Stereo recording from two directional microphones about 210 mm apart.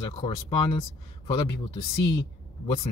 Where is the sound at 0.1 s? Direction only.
25° left (ahead or behind).